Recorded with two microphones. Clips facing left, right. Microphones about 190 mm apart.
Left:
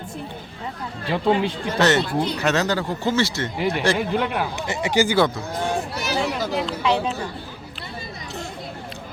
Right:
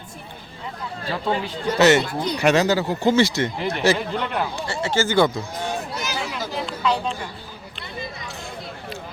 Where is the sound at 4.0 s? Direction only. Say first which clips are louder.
Left 2 dB; 5° left (ahead or behind).